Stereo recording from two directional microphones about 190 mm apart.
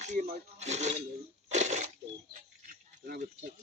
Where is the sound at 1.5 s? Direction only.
35° right (ahead or behind).